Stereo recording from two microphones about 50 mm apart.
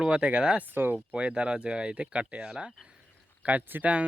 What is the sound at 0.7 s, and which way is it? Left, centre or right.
Speech, right.